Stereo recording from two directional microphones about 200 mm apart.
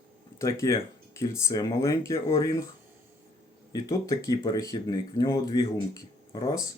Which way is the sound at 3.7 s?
15° left (ahead or behind).